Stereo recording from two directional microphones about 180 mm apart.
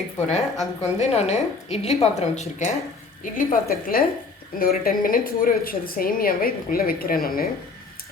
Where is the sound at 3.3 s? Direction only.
50° left (ahead or behind).